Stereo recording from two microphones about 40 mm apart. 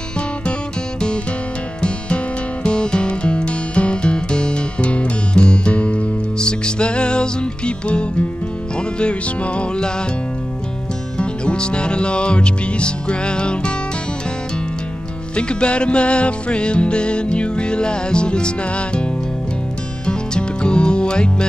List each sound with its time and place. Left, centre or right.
2.6 s music: left
6.3 s music: left
11.1 s music: left
15.3 s music: left
20.1 s music: left